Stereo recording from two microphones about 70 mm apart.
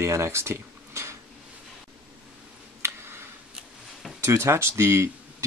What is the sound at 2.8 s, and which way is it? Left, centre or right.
Tick, right.